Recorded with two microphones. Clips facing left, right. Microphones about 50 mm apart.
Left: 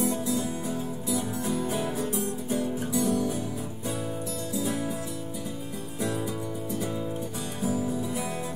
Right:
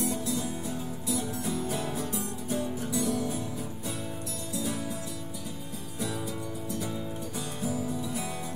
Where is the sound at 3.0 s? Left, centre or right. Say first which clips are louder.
Left 4 dB; centre.